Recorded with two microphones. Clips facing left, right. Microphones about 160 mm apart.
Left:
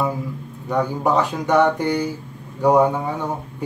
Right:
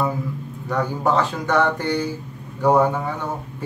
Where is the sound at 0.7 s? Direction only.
15° left (ahead or behind).